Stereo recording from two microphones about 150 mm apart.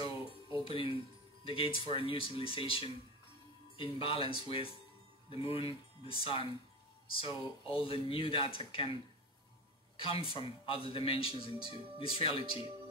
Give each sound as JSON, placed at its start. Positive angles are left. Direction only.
{"t": 0.0, "sound": "music", "side_deg": 35}
{"t": 1.4, "sound": "speech", "side_deg": 35}
{"t": 9.9, "sound": "speech", "side_deg": 35}